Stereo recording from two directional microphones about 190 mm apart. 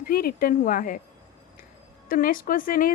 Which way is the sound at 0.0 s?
50° left (ahead or behind).